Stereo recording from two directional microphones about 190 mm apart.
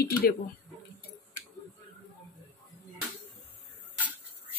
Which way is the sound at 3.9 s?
10° right (ahead or behind).